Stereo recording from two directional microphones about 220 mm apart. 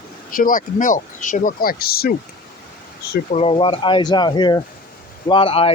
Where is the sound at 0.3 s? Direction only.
40° left (ahead or behind).